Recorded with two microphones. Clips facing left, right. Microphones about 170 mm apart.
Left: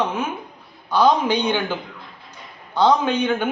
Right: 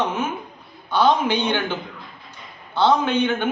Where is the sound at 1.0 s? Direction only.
15° left (ahead or behind).